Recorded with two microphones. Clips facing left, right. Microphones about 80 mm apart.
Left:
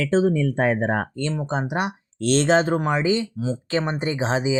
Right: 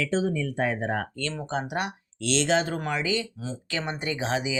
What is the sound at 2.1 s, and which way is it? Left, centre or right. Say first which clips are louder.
Speech: left 6 dB; left.